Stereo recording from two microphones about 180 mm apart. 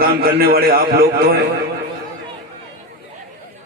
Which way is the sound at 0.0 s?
55° right (ahead or behind).